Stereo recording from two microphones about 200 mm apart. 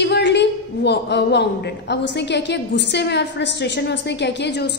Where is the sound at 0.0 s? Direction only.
60° left (ahead or behind).